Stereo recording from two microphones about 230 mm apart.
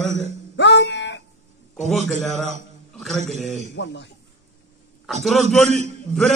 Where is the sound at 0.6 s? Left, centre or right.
Left.